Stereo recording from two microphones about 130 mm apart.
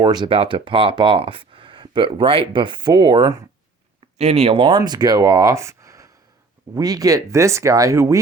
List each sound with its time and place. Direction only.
0.0 s speech: 35° right (ahead or behind)
4.2 s speech: 55° right (ahead or behind)
4.8 s speech: 30° right (ahead or behind)